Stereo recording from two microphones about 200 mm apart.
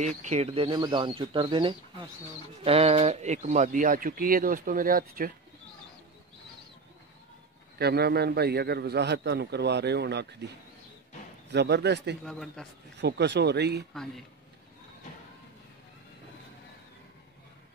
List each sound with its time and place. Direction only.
0.2 s speech: 35° right (ahead or behind)
7.8 s a man's voice: 55° right (ahead or behind)
11.5 s a man's voice: 55° right (ahead or behind)
12.3 s a man's voice: centre (ahead or behind)
13.0 s a man's voice: 60° right (ahead or behind)